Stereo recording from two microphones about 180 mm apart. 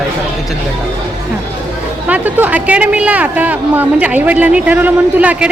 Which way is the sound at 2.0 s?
10° right (ahead or behind).